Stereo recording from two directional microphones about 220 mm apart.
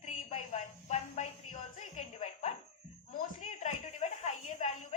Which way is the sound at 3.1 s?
35° left (ahead or behind).